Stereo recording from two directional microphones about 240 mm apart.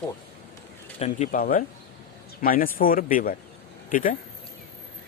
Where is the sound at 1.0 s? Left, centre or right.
Left.